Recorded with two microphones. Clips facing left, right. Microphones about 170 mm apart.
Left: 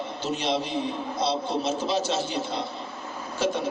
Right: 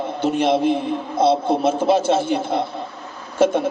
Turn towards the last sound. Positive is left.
turn(degrees=-55)  # may be behind; listen again after turning